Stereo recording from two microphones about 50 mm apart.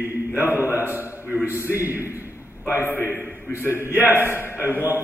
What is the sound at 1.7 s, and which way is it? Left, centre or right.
Speech, right.